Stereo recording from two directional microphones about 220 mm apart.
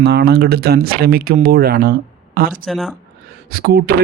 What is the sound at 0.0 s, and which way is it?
Speech, 50° right (ahead or behind).